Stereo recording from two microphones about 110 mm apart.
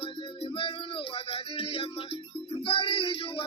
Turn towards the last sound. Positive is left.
turn(degrees=55)  # may be behind; listen again after turning